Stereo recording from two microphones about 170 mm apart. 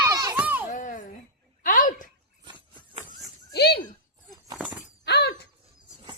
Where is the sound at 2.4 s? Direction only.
25° right (ahead or behind).